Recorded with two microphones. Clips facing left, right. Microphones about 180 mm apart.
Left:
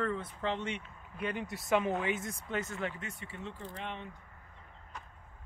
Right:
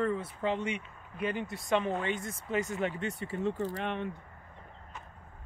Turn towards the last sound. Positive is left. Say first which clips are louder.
# right 7 dB
turn(degrees=-60)  # may be behind; listen again after turning